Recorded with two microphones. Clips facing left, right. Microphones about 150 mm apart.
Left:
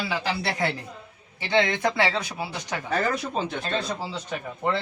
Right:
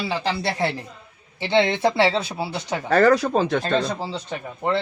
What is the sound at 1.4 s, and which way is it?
Speech, 15° right (ahead or behind).